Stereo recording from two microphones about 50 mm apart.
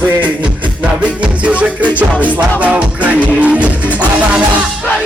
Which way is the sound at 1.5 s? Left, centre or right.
Right.